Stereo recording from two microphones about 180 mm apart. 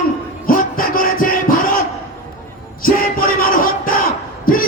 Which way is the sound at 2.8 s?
55° left (ahead or behind).